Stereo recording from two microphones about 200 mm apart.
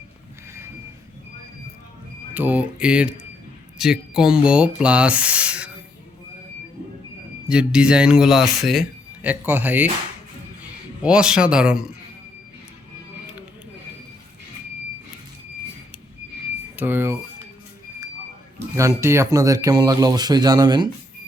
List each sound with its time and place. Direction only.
2.3 s speech: 10° right (ahead or behind)
7.4 s speech: 5° right (ahead or behind)
16.7 s speech: 10° right (ahead or behind)
18.8 s speech: 15° right (ahead or behind)